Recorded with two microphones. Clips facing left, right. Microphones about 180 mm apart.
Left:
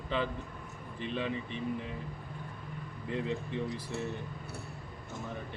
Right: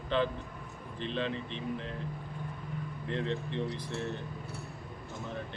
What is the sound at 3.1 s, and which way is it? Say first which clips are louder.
Speech: even; 10° left (ahead or behind).